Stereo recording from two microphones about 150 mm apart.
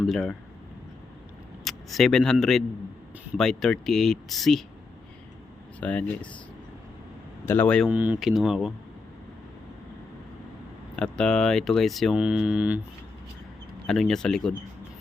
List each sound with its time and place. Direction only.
0.0 s speech: centre (ahead or behind)
1.6 s speech: centre (ahead or behind)
5.8 s a man's voice: 10° left (ahead or behind)
7.4 s a man's voice: 15° left (ahead or behind)
7.9 s speech: 10° right (ahead or behind)
10.9 s speech: 5° left (ahead or behind)
13.8 s speech: centre (ahead or behind)